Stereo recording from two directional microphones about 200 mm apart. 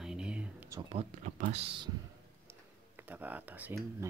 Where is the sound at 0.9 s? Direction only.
35° right (ahead or behind).